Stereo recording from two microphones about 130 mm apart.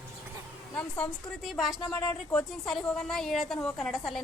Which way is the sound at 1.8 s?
25° left (ahead or behind).